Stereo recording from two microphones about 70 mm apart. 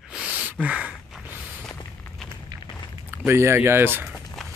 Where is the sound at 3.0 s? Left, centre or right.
Right.